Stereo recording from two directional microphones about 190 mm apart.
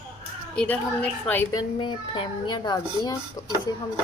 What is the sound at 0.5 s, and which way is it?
Speech, 5° left (ahead or behind).